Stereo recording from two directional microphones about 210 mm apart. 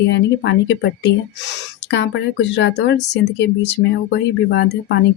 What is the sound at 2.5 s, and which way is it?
Speech, 55° left (ahead or behind).